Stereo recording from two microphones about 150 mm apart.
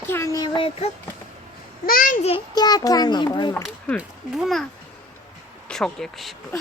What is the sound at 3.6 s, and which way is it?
Speech, 5° left (ahead or behind).